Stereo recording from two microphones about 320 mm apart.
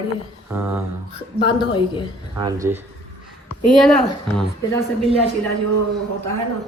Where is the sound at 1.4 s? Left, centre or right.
Centre.